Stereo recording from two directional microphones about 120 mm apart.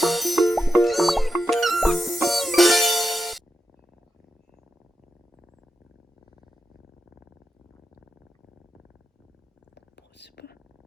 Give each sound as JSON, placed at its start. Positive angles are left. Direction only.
{"t": 0.0, "sound": "music", "side_deg": 0}